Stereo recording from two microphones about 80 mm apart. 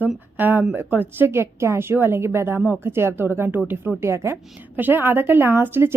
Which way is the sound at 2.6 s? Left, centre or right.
Centre.